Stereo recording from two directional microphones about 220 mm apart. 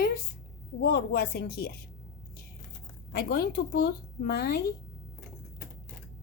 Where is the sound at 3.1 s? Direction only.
45° left (ahead or behind).